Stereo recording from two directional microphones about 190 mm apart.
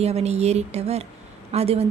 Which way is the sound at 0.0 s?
35° right (ahead or behind).